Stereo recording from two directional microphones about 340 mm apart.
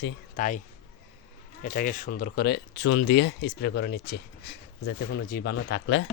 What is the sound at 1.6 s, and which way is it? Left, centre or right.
Speech, left.